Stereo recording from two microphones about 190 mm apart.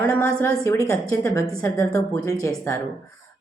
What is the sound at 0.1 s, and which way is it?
A woman's voice, 10° left (ahead or behind).